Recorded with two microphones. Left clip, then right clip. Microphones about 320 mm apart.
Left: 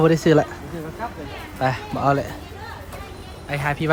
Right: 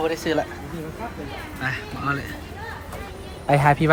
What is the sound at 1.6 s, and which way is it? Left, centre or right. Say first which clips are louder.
Speech: left 6 dB; centre.